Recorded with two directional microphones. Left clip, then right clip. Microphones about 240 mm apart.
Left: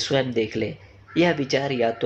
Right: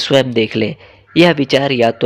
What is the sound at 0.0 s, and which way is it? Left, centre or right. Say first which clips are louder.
Speech: right 10 dB; right.